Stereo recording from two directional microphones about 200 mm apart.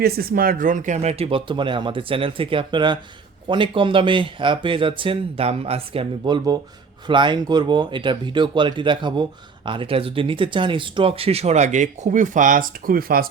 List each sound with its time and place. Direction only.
0.0 s speech: 50° right (ahead or behind)